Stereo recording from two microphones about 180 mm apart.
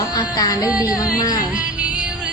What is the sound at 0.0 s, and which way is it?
Music, 20° left (ahead or behind).